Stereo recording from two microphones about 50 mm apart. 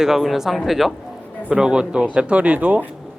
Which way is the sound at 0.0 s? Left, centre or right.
Centre.